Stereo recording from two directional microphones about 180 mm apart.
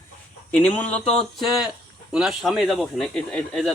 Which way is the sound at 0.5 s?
10° left (ahead or behind).